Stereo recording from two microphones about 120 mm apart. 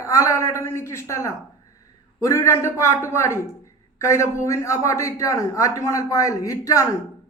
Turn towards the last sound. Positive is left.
turn(degrees=25)  # may be behind; listen again after turning